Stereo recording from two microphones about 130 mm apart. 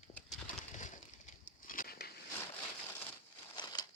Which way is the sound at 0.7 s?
75° left (ahead or behind).